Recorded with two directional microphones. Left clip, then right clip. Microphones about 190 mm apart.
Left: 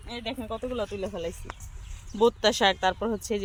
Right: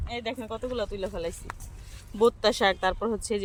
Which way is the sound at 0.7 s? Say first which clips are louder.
Right 2 dB; 10° right (ahead or behind).